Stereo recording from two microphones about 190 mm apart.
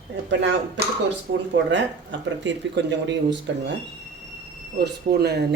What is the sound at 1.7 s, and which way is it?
Speech, 70° right (ahead or behind).